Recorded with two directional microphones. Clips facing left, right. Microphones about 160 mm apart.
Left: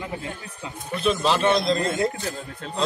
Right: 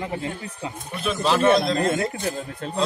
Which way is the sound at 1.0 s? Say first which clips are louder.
Even; 5° right (ahead or behind).